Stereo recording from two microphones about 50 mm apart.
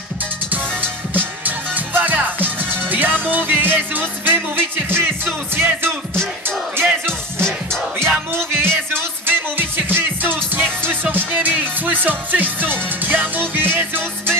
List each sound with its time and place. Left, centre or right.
0.5 s music: right
8.3 s music: right